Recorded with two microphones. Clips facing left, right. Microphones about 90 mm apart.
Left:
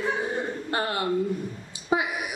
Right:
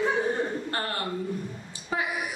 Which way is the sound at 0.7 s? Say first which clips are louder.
Left 5 dB; 15° left (ahead or behind).